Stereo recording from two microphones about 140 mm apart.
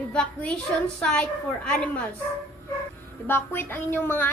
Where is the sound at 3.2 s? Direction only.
15° left (ahead or behind).